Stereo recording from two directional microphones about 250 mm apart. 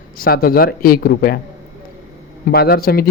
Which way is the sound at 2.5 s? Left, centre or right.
Left.